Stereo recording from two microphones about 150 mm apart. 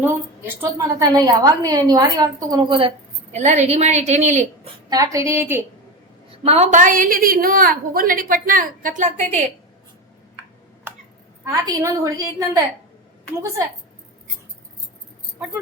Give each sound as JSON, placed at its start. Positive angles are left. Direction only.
{"t": 0.0, "sound": "a woman's voice", "side_deg": -15}
{"t": 3.3, "sound": "a woman's voice", "side_deg": -50}
{"t": 4.9, "sound": "a woman's voice", "side_deg": -25}
{"t": 6.3, "sound": "a woman's voice", "side_deg": -45}
{"t": 11.4, "sound": "a woman's voice", "side_deg": -25}